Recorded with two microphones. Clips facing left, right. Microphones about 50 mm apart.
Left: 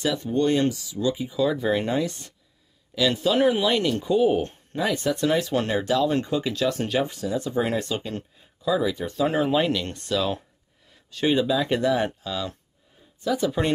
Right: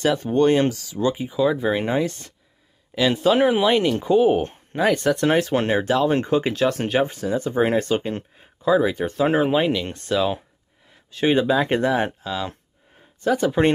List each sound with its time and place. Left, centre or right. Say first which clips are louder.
0.0 s speech: right 5 dB; right
1.4 s speech: right 3 dB; centre
2.0 s speech: right 3 dB; right
4.9 s speech: right 1 dB; right
9.6 s speech: right 2 dB; centre
11.3 s speech: right 3 dB; right
13.2 s speech: right 4 dB; right